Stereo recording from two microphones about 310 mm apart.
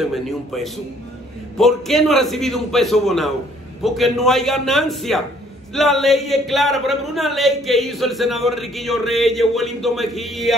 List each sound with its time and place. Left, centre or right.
0.0 s a man's voice: centre